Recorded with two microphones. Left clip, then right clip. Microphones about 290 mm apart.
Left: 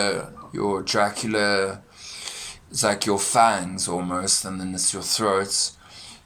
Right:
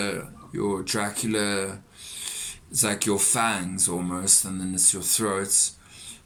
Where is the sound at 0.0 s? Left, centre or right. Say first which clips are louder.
Left 6 dB; centre.